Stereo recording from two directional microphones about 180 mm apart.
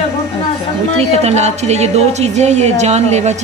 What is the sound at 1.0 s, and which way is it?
A woman's voice, 35° right (ahead or behind).